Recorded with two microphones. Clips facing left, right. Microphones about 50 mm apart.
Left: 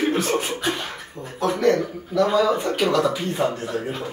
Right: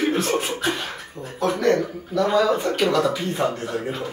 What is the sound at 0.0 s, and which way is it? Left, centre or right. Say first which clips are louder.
Chuckle: even; centre.